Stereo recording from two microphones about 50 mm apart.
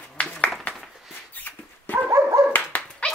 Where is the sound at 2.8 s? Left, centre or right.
Left.